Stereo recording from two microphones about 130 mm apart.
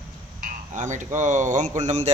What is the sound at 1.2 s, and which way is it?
Speech, 70° right (ahead or behind).